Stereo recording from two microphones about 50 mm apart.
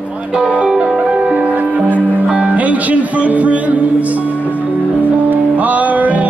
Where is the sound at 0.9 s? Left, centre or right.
Right.